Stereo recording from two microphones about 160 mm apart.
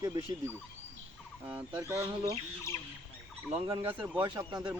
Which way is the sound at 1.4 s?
10° right (ahead or behind).